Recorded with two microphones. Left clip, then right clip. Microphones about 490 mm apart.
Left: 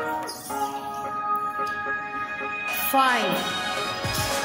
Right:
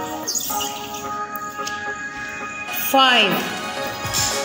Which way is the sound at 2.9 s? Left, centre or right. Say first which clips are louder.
Right 6 dB; left.